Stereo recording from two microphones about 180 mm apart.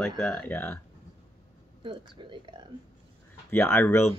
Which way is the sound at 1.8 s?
25° right (ahead or behind).